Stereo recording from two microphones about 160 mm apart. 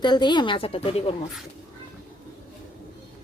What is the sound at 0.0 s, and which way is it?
A woman's voice, 25° left (ahead or behind).